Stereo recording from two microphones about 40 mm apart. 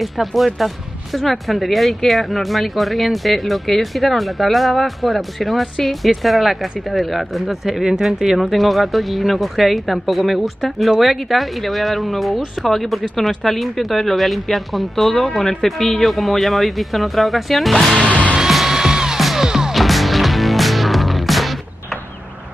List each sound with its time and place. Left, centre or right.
0.0 s speech: centre
18.5 s music: centre
19.1 s music: centre
19.4 s music: centre
19.7 s music: centre